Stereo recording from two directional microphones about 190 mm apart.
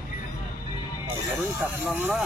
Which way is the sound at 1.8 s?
10° right (ahead or behind).